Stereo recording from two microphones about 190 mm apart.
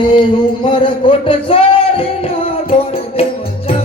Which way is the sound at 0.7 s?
25° left (ahead or behind).